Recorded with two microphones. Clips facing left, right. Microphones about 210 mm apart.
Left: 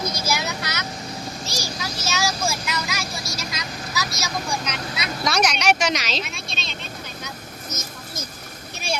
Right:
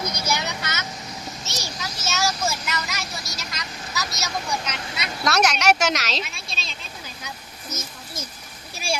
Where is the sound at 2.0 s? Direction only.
Centre (ahead or behind).